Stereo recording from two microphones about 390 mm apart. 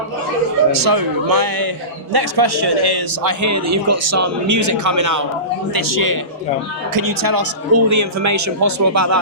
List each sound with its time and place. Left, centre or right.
0.7 s a man's voice: right
2.1 s a man's voice: right
3.4 s a man's voice: right
7.7 s a man's voice: right